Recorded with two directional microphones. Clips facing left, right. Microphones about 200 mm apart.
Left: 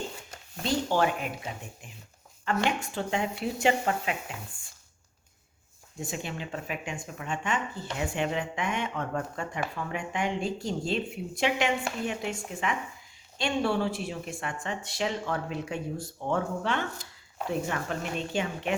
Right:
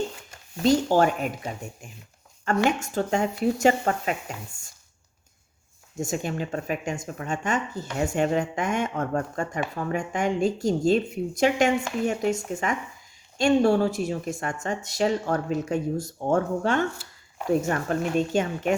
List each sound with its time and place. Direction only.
0.6 s speech: 40° right (ahead or behind)
2.6 s speech: 45° right (ahead or behind)
6.0 s speech: 45° right (ahead or behind)